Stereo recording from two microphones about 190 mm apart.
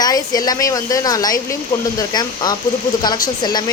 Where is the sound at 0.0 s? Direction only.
20° left (ahead or behind).